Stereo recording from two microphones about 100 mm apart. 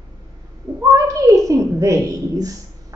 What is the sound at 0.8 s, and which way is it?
Speech, 35° right (ahead or behind).